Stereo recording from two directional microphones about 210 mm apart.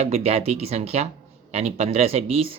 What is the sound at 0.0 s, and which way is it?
Speech, 30° right (ahead or behind).